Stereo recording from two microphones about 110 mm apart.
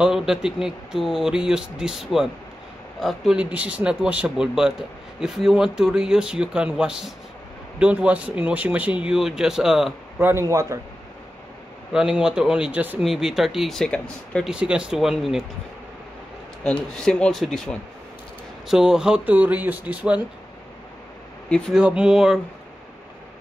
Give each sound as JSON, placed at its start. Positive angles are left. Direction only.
{"t": 0.0, "sound": "speech", "side_deg": -5}
{"t": 3.3, "sound": "speech", "side_deg": -10}
{"t": 10.1, "sound": "a man's voice", "side_deg": -20}
{"t": 10.5, "sound": "a man's voice", "side_deg": -30}
{"t": 11.9, "sound": "speech", "side_deg": -5}
{"t": 13.0, "sound": "speech", "side_deg": -5}
{"t": 14.5, "sound": "speech", "side_deg": -10}
{"t": 16.6, "sound": "speech", "side_deg": 10}
{"t": 21.5, "sound": "speech", "side_deg": 10}
{"t": 21.7, "sound": "speech", "side_deg": -10}